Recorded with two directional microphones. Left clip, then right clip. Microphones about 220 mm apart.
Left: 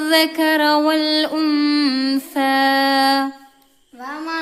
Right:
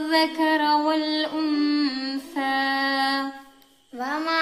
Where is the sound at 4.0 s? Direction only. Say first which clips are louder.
Right 1 dB; 40° right (ahead or behind).